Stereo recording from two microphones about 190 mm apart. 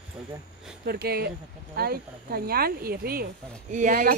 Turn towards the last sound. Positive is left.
turn(degrees=-45)  # may be behind; listen again after turning